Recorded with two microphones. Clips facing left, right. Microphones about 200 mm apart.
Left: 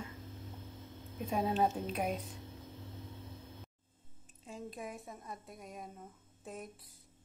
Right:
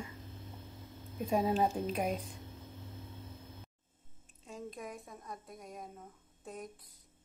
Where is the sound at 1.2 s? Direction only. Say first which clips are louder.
Right 2 dB; 5° right (ahead or behind).